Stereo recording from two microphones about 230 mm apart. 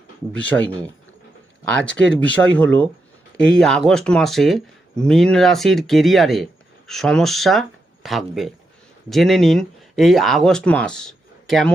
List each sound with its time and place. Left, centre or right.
0.3 s speech: centre
1.7 s speech: centre